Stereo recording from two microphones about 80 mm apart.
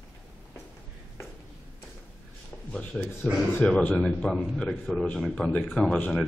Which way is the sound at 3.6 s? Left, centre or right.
Centre.